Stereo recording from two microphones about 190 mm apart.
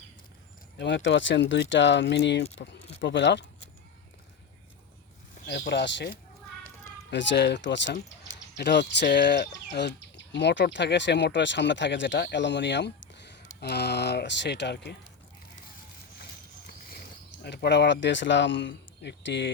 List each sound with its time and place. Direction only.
0.8 s speech: 70° left (ahead or behind)
5.5 s speech: 65° left (ahead or behind)
17.4 s speech: 65° left (ahead or behind)